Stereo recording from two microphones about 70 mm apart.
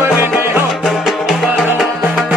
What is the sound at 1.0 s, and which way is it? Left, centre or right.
Music, centre.